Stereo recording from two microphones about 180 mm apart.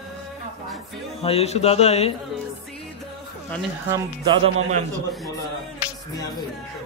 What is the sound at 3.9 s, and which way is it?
Speech, 25° right (ahead or behind).